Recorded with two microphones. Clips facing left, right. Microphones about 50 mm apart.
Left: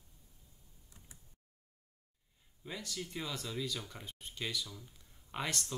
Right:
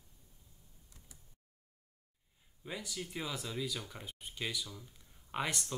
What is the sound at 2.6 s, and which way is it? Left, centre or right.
Speech, centre.